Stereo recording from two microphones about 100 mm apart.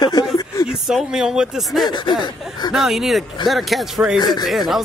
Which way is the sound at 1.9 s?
50° left (ahead or behind).